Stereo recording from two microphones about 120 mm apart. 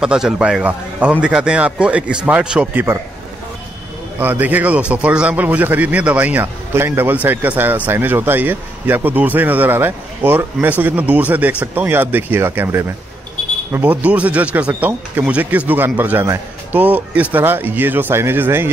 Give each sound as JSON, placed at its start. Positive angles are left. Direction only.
{"t": 0.0, "sound": "a man's voice", "side_deg": -5}
{"t": 4.2, "sound": "a man's voice", "side_deg": -15}